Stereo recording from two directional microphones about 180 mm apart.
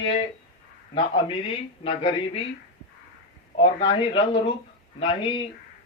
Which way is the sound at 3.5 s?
25° left (ahead or behind).